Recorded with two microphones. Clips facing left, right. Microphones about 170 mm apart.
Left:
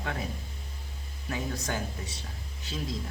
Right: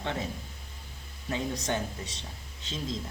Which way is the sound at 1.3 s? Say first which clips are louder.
Right 2 dB; 20° right (ahead or behind).